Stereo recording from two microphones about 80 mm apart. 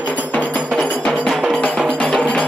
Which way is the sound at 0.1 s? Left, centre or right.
Centre.